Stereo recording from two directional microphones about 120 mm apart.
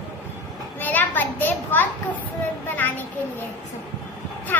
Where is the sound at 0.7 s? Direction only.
15° left (ahead or behind).